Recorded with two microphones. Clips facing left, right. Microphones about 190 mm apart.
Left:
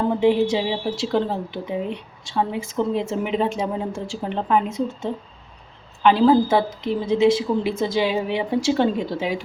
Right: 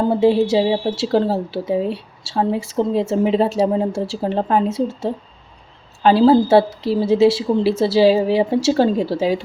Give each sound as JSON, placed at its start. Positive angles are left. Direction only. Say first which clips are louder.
{"t": 0.0, "sound": "speech", "louder": "right 3 dB", "side_deg": -35}